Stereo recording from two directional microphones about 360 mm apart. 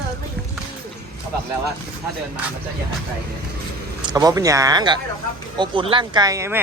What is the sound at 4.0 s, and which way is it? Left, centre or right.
Speech, centre.